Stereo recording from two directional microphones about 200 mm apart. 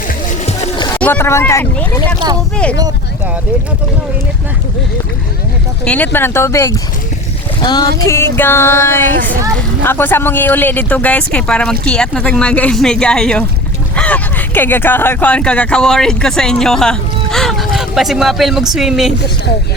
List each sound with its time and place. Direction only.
0.9 s speech: 10° left (ahead or behind)
5.8 s speech: 5° left (ahead or behind)